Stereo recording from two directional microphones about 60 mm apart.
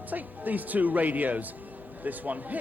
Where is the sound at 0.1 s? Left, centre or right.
Right.